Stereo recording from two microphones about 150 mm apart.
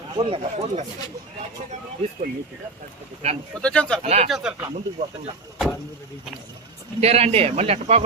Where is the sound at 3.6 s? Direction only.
5° left (ahead or behind).